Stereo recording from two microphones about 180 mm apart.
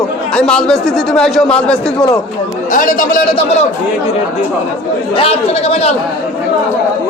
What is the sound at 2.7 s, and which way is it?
Speech, 50° left (ahead or behind).